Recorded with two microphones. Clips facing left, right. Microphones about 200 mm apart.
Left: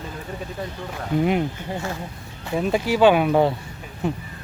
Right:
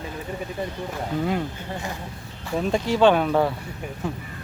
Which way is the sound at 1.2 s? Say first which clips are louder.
Left 5 dB; 20° left (ahead or behind).